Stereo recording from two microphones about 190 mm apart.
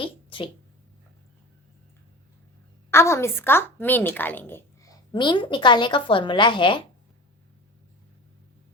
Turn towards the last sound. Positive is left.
turn(degrees=25)  # may be behind; listen again after turning